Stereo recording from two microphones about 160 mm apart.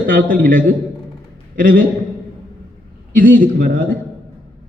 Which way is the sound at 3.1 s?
60° right (ahead or behind).